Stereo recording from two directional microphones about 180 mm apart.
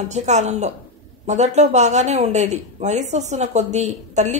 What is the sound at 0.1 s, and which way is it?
A woman's voice, 40° right (ahead or behind).